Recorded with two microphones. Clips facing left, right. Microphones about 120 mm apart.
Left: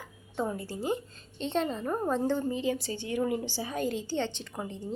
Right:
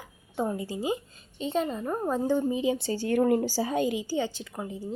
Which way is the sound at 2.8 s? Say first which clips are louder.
Right 6 dB; 40° right (ahead or behind).